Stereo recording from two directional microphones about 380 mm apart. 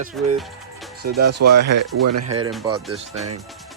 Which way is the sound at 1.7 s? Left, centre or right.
Right.